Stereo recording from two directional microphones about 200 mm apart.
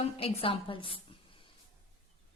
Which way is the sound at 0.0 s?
30° left (ahead or behind).